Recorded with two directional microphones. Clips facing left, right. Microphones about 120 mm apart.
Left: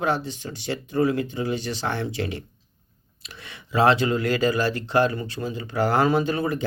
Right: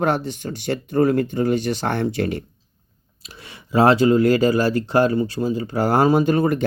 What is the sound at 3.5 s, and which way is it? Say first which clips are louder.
Speech: right 4 dB; 40° right (ahead or behind).